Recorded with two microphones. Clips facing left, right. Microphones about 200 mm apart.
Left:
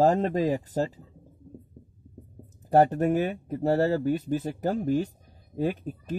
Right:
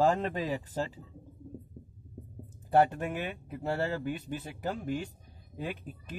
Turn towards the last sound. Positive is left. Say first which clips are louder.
# left 10 dB
turn(degrees=40)  # may be behind; listen again after turning